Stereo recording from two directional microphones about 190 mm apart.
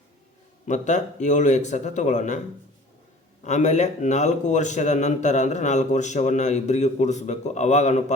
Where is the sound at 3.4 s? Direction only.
40° left (ahead or behind).